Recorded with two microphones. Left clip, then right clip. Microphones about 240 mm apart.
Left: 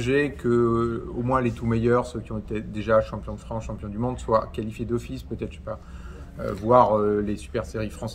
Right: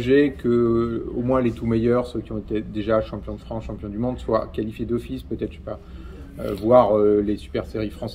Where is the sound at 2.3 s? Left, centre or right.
Left.